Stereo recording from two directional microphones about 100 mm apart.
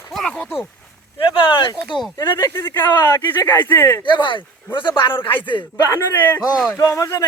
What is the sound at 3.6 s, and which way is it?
Speech, 20° left (ahead or behind).